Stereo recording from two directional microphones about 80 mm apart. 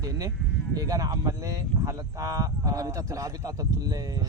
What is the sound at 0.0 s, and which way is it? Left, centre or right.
Sheep, right.